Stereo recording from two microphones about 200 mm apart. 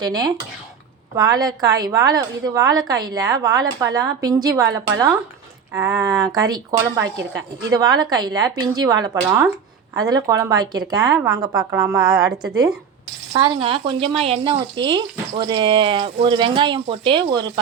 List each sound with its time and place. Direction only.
0.0 s speech: 20° right (ahead or behind)
7.0 s speech: 65° right (ahead or behind)
7.7 s speech: 20° right (ahead or behind)
11.5 s a woman's voice: 10° right (ahead or behind)
13.3 s speech: 25° right (ahead or behind)